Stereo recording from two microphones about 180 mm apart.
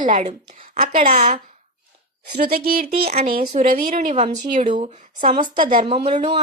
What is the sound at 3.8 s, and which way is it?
A woman's voice, 40° right (ahead or behind).